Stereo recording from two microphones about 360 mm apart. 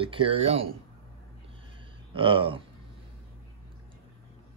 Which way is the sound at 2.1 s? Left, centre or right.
Centre.